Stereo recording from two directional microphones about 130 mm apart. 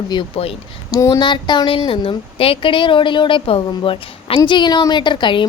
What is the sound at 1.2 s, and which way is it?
A woman's voice, 35° left (ahead or behind).